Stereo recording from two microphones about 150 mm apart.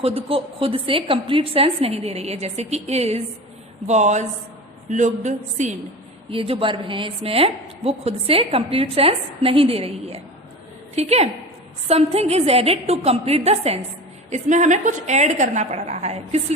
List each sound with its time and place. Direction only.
0.0 s a woman's voice: 40° right (ahead or behind)
6.3 s a woman's voice: 35° right (ahead or behind)